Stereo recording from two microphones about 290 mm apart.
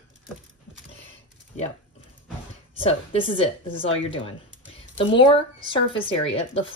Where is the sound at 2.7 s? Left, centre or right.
Centre.